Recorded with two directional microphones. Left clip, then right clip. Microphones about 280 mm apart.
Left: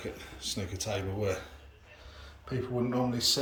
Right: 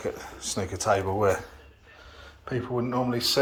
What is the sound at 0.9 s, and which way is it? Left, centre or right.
Speech, right.